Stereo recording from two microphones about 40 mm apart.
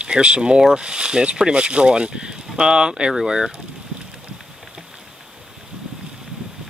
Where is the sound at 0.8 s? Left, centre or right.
Right.